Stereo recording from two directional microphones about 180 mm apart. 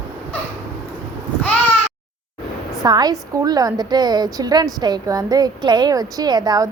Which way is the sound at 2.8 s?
20° right (ahead or behind).